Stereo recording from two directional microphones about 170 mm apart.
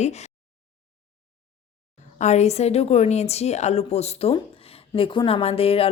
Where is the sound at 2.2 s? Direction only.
40° left (ahead or behind).